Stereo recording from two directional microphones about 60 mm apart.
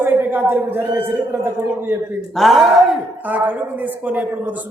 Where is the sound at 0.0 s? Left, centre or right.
Right.